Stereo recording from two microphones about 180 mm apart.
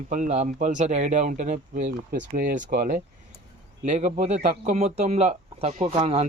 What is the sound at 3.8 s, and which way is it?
A man's voice, 40° right (ahead or behind).